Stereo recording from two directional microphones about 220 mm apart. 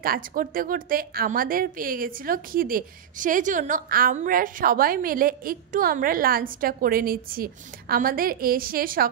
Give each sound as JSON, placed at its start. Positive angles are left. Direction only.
{"t": 0.0, "sound": "a woman's voice", "side_deg": -40}